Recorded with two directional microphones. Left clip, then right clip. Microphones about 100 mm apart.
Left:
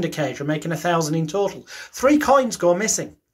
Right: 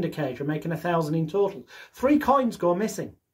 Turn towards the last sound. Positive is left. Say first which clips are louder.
# left 6 dB
turn(degrees=-40)  # may be behind; listen again after turning